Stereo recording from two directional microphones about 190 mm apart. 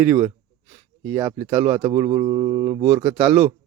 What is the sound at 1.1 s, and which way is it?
Mantra, 15° right (ahead or behind).